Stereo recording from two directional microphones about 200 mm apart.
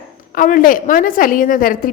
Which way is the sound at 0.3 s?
40° left (ahead or behind).